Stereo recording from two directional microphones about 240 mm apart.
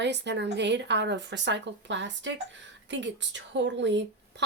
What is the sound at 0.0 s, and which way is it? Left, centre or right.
A woman's voice, right.